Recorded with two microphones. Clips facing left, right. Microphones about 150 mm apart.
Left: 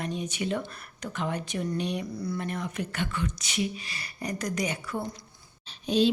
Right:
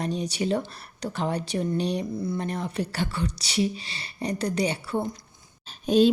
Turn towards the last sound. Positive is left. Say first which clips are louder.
# right 5 dB
turn(degrees=-45)  # may be behind; listen again after turning